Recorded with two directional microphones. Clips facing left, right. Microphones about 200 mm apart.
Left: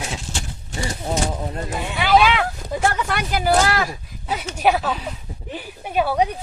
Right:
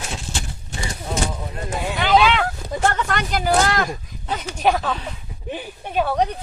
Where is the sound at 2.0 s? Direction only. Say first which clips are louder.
Left 1 dB; 5° left (ahead or behind).